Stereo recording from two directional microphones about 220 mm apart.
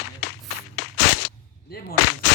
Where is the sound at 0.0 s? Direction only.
50° left (ahead or behind).